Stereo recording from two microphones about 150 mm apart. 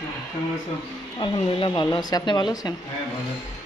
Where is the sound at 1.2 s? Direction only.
35° left (ahead or behind).